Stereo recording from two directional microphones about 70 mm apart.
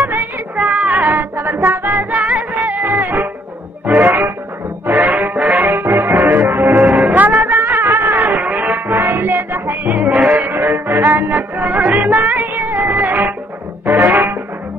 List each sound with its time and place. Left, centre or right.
0.0 s child singing: right
0.7 s music: centre